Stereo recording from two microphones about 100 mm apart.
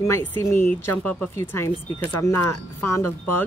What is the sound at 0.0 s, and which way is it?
Speech, 25° left (ahead or behind).